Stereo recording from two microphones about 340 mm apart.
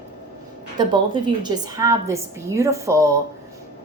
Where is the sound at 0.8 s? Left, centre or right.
Centre.